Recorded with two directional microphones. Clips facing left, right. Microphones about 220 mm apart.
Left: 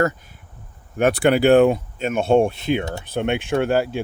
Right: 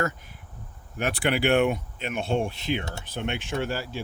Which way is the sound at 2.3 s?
55° left (ahead or behind).